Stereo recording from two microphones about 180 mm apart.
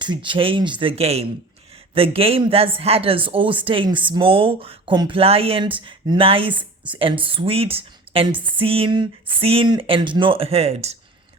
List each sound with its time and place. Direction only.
0.0 s a woman's voice: 25° right (ahead or behind)